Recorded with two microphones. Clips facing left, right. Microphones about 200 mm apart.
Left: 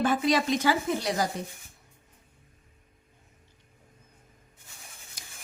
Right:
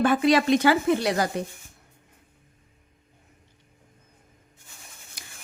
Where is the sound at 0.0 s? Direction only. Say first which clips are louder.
Right 5 dB; 65° right (ahead or behind).